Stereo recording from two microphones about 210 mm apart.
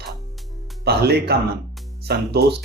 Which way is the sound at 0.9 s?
50° right (ahead or behind).